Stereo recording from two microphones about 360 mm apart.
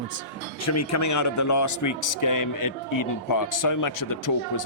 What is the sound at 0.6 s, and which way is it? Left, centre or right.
A man's voice, left.